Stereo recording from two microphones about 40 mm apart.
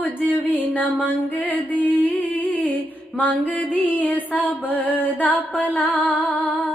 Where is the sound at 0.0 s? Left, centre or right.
Left.